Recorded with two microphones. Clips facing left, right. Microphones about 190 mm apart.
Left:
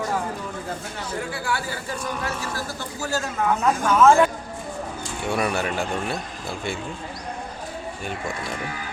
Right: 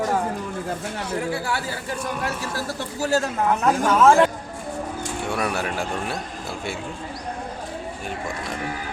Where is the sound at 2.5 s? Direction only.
35° right (ahead or behind).